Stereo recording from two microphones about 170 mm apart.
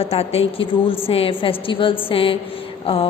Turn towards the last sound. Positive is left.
turn(degrees=35)  # may be behind; listen again after turning